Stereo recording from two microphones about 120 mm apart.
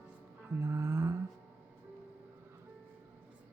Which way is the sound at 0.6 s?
20° right (ahead or behind).